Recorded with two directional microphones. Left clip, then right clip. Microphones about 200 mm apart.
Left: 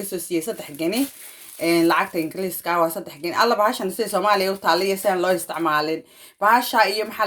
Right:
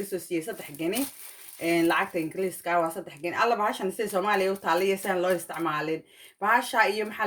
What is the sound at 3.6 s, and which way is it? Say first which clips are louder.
Speech: left 7 dB; 30° left (ahead or behind).